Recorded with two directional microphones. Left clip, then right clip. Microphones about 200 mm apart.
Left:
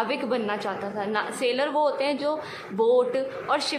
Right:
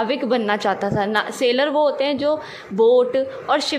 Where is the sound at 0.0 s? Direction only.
25° right (ahead or behind).